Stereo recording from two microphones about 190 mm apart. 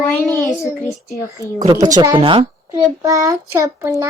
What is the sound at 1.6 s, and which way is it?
A child's voice, 25° right (ahead or behind).